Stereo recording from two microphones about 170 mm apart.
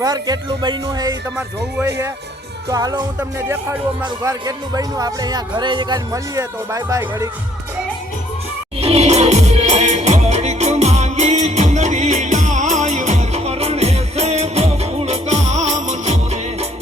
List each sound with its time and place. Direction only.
0.0 s speech: 25° right (ahead or behind)
2.6 s speech: 20° right (ahead or behind)
3.2 s music: 15° right (ahead or behind)
4.0 s speech: 20° right (ahead or behind)
8.8 s music: 40° right (ahead or behind)